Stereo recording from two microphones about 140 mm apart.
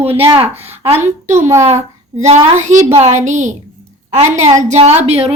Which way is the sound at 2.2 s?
55° right (ahead or behind).